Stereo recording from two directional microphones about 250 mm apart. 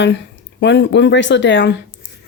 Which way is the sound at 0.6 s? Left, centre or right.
Left.